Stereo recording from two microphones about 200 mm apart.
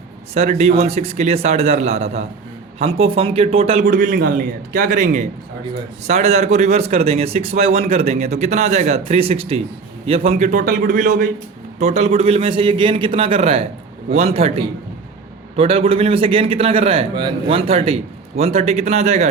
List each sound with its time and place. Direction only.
0.3 s a man's voice: 35° right (ahead or behind)
3.8 s a man's voice: 45° right (ahead or behind)